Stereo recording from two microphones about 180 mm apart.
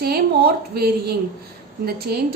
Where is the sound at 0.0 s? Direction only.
60° right (ahead or behind).